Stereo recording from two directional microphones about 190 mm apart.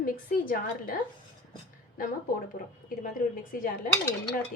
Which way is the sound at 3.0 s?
45° left (ahead or behind).